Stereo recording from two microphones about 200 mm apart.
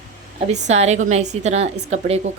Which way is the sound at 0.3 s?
30° right (ahead or behind).